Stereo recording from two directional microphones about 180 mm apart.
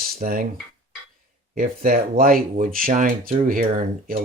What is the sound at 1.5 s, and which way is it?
Speech, 50° right (ahead or behind).